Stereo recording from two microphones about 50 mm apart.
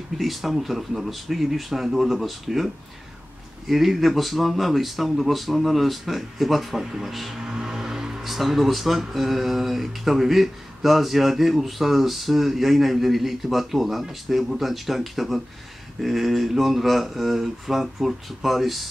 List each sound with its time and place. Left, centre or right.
0.2 s speech: centre